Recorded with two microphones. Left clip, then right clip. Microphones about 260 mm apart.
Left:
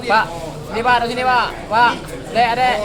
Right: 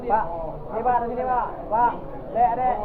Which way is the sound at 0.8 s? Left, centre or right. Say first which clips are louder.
Left 7 dB; left.